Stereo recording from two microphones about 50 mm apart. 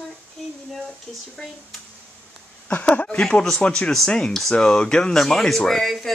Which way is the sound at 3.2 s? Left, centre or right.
Centre.